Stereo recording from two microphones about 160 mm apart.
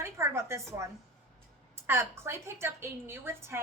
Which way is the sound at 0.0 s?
15° right (ahead or behind).